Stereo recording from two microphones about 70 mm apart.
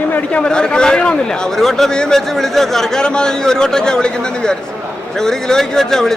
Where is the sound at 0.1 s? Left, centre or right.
Centre.